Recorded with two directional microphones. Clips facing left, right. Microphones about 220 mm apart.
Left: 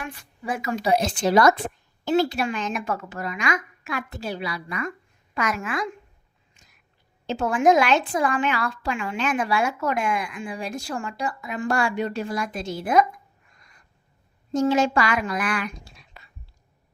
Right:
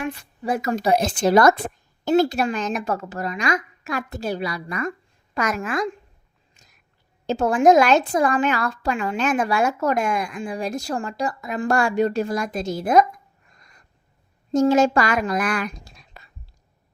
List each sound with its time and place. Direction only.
0.4 s a woman's voice: 40° right (ahead or behind)
6.6 s whispering: 40° right (ahead or behind)
7.3 s a woman's voice: 40° right (ahead or behind)
13.6 s owl: 40° right (ahead or behind)
14.5 s a woman's voice: 45° right (ahead or behind)